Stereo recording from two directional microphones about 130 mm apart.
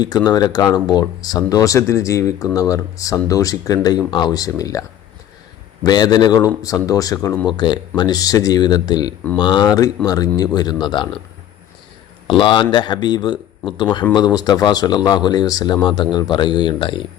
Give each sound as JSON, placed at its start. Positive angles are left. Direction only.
{"t": 0.3, "sound": "a man's voice", "side_deg": 30}
{"t": 12.3, "sound": "a man's voice", "side_deg": 40}